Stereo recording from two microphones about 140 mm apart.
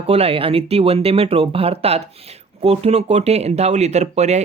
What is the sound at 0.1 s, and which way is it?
Speech, 45° right (ahead or behind).